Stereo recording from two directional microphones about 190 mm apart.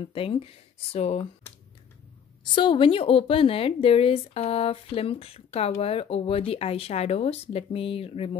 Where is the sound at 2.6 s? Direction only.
25° left (ahead or behind).